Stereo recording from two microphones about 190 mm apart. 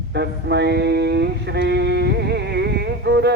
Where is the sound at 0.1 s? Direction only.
65° right (ahead or behind).